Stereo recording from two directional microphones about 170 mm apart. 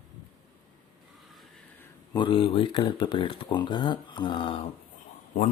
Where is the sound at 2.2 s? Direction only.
30° left (ahead or behind).